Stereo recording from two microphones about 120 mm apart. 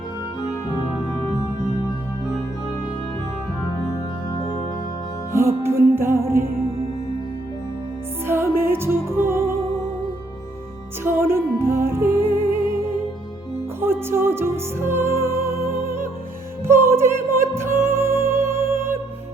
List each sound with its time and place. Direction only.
5.3 s music: 20° right (ahead or behind)
8.3 s music: 20° right (ahead or behind)
11.0 s music: 20° right (ahead or behind)
13.8 s music: 20° right (ahead or behind)